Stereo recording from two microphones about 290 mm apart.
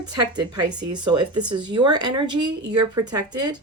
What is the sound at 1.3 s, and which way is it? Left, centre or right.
Speech, right.